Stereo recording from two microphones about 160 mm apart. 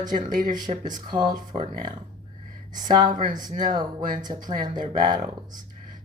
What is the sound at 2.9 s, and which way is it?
Speech, 25° right (ahead or behind).